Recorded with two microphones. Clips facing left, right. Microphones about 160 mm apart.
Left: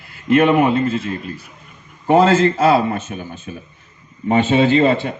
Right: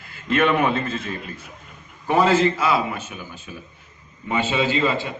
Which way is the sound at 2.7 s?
55° left (ahead or behind).